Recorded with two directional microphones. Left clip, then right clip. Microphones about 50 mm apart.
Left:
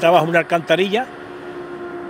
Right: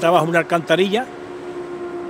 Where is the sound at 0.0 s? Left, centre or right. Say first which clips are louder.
Left 2 dB; centre.